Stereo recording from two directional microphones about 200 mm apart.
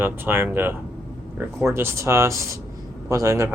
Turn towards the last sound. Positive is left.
turn(degrees=-15)  # may be behind; listen again after turning